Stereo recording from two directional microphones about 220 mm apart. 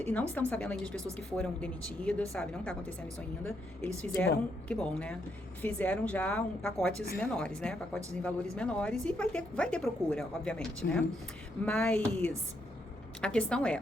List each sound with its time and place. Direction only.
0.0 s a woman's voice: 5° left (ahead or behind)
4.0 s a woman's voice: 5° left (ahead or behind)